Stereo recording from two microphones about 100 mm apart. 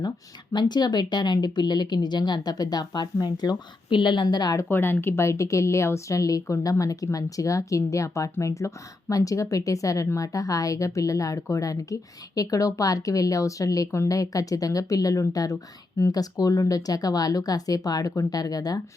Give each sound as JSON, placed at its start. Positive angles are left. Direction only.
{"t": 0.5, "sound": "a woman's voice", "side_deg": 45}
{"t": 4.7, "sound": "a woman's voice", "side_deg": 20}